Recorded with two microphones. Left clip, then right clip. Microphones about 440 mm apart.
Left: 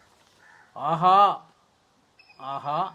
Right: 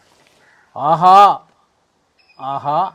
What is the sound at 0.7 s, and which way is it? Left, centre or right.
Speech, right.